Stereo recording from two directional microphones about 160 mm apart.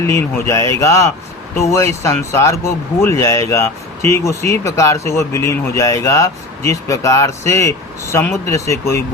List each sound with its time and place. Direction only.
0.1 s speech: 20° left (ahead or behind)